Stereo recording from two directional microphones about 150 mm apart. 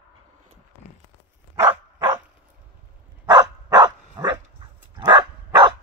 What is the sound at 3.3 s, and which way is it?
Dog, 30° right (ahead or behind).